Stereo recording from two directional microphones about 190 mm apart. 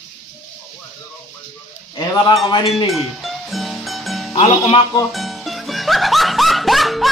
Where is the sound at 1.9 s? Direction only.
25° left (ahead or behind).